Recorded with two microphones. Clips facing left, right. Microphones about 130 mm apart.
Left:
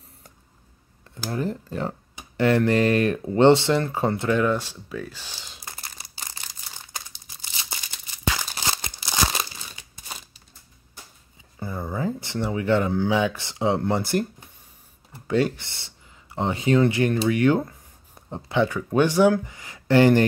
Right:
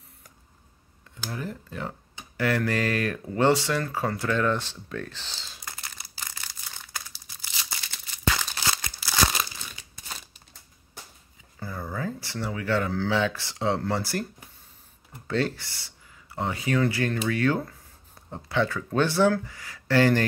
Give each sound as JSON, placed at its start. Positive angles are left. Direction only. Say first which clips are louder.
{"t": 1.1, "sound": "speech", "louder": "left 7 dB", "side_deg": 35}
{"t": 6.0, "sound": "crumpling", "louder": "even", "side_deg": 25}
{"t": 11.6, "sound": "speech", "louder": "left 4 dB", "side_deg": 20}
{"t": 15.2, "sound": "speech", "louder": "left 5 dB", "side_deg": 15}